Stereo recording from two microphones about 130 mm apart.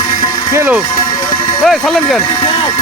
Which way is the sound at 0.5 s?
20° right (ahead or behind).